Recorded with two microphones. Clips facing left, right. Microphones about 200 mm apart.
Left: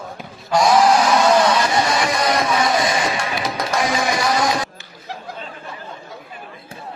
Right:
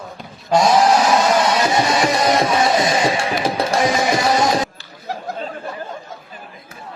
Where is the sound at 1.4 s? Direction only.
25° right (ahead or behind).